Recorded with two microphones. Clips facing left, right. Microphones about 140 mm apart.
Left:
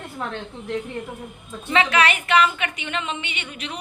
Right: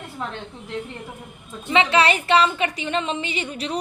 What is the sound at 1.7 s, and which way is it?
A woman's voice, 25° right (ahead or behind).